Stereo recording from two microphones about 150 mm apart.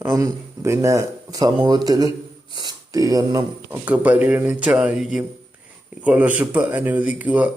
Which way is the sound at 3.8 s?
10° right (ahead or behind).